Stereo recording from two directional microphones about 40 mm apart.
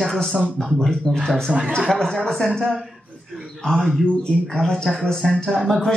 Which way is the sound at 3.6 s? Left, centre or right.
Centre.